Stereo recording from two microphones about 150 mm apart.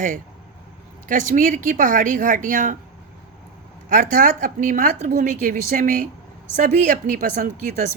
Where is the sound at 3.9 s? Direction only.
55° right (ahead or behind).